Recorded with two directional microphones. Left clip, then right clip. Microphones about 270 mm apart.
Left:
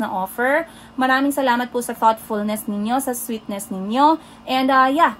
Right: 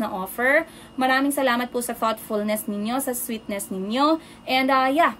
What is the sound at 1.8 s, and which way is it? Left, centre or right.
Speech, left.